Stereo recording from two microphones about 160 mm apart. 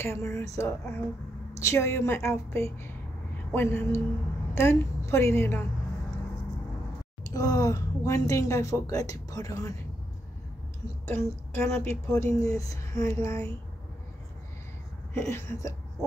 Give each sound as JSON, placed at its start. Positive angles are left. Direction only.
{"t": 0.0, "sound": "a woman's voice", "side_deg": 15}
{"t": 7.2, "sound": "a woman's voice", "side_deg": 20}
{"t": 11.1, "sound": "a woman's voice", "side_deg": 15}
{"t": 15.1, "sound": "a woman's voice", "side_deg": 15}